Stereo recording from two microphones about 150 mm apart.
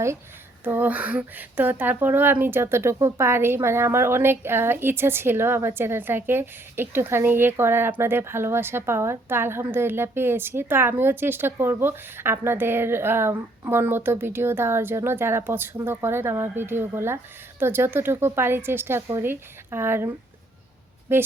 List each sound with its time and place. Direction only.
0.6 s speech: 15° right (ahead or behind)
21.1 s speech: 15° right (ahead or behind)